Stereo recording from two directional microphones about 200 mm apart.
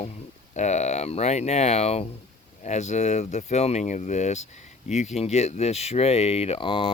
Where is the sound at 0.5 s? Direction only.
35° left (ahead or behind).